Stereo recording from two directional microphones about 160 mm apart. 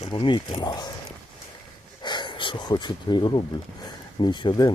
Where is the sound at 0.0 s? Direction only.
30° left (ahead or behind).